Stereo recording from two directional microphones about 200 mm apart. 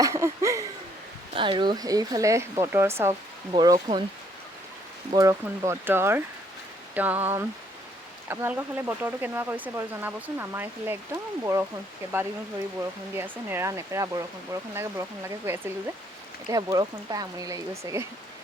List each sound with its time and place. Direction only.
0.0 s speech: 15° right (ahead or behind)
3.5 s speech: 25° right (ahead or behind)
5.1 s speech: 15° right (ahead or behind)
13.1 s speech: 10° right (ahead or behind)